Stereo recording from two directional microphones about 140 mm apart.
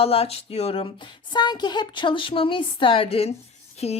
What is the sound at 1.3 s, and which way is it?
Speech, 30° left (ahead or behind).